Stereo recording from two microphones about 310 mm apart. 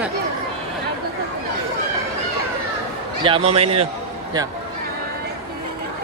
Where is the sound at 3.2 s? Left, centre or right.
Centre.